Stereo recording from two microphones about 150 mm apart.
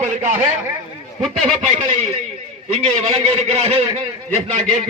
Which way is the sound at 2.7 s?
45° right (ahead or behind).